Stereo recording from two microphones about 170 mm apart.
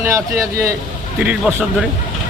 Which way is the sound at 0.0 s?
20° right (ahead or behind).